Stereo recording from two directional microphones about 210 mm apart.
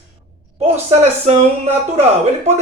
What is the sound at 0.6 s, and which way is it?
Speech, 30° right (ahead or behind).